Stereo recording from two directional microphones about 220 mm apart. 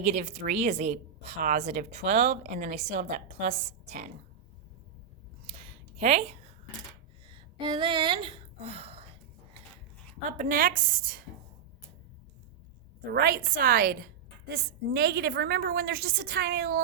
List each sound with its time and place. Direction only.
0.0 s a woman's voice: 30° right (ahead or behind)
6.0 s a woman's voice: 30° right (ahead or behind)
7.3 s a sound: 20° right (ahead or behind)
10.2 s a woman's voice: 35° right (ahead or behind)
13.1 s a woman's voice: 40° right (ahead or behind)